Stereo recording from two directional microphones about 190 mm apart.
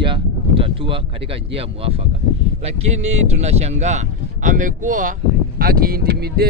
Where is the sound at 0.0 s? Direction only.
25° right (ahead or behind).